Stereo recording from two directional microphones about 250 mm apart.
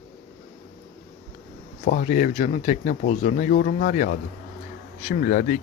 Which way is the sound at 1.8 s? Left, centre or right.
Left.